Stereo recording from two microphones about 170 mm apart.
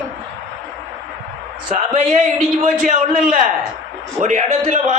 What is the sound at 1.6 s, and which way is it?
A man's voice, 45° right (ahead or behind).